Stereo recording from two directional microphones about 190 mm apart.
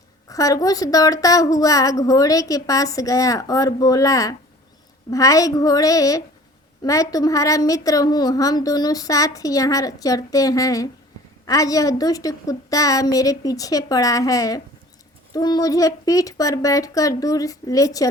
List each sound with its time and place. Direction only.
0.3 s a woman's voice: 20° left (ahead or behind)